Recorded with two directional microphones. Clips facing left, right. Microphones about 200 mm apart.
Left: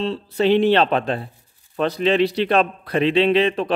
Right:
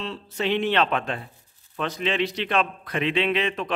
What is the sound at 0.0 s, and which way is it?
A man's voice, 35° left (ahead or behind).